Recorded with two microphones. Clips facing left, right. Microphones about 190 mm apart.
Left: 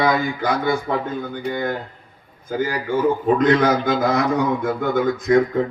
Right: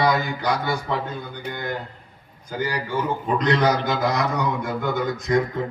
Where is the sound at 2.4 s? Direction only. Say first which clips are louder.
Left 4 dB; 55° left (ahead or behind).